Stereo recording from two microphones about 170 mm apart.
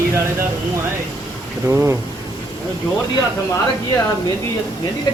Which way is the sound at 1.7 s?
15° right (ahead or behind).